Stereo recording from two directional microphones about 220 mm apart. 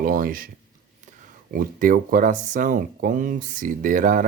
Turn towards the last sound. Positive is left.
turn(degrees=-35)  # may be behind; listen again after turning